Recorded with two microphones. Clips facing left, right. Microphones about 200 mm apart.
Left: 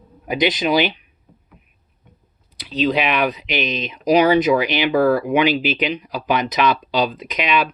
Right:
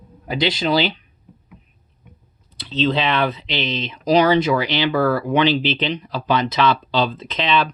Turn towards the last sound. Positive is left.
turn(degrees=15)  # may be behind; listen again after turning